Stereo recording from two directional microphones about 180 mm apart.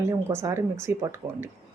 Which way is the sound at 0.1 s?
15° right (ahead or behind).